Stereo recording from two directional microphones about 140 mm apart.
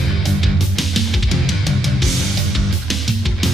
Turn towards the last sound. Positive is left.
turn(degrees=0)  # may be behind; listen again after turning